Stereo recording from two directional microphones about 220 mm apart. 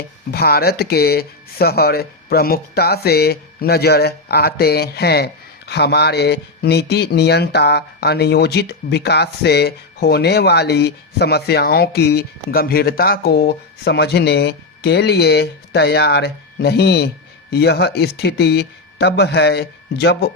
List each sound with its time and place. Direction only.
0.3 s speech: 45° left (ahead or behind)